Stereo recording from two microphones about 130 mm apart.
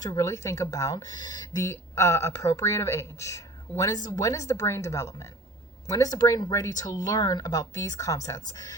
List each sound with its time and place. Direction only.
0.0 s speech: 25° left (ahead or behind)